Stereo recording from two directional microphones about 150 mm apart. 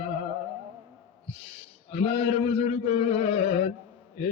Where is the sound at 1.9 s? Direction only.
40° left (ahead or behind).